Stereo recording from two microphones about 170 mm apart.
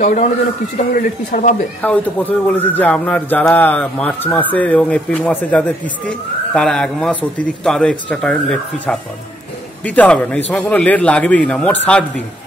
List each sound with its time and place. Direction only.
0.0 s speech: 45° left (ahead or behind)
1.8 s a man's voice: 10° left (ahead or behind)